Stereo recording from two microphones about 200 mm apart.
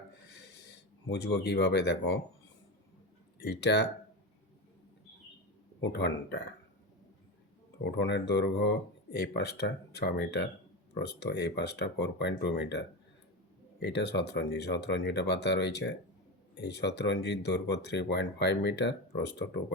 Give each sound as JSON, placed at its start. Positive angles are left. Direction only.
{"t": 0.3, "sound": "a sound", "side_deg": 60}
{"t": 3.4, "sound": "speech", "side_deg": 55}
{"t": 5.8, "sound": "speech", "side_deg": 60}
{"t": 7.9, "sound": "speech", "side_deg": 60}